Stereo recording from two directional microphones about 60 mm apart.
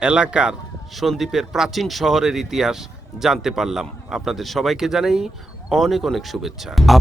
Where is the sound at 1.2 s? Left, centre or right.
Centre.